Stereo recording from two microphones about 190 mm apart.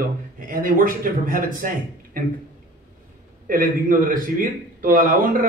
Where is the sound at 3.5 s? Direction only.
45° right (ahead or behind).